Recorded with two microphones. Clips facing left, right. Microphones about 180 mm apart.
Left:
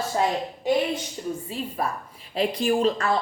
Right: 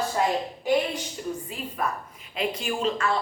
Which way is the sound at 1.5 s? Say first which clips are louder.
Left 2 dB; 35° left (ahead or behind).